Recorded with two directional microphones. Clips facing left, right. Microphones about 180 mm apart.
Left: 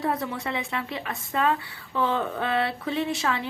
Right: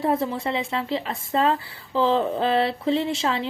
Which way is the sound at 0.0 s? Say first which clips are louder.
Right 5 dB; 25° right (ahead or behind).